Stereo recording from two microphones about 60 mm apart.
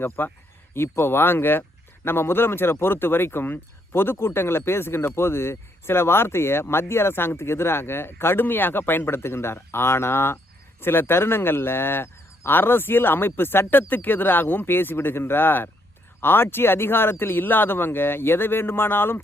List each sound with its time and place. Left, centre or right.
0.2 s speech: left
0.7 s speech: left